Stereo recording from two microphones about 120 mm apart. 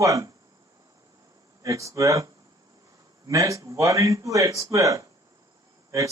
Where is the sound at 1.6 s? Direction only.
25° right (ahead or behind).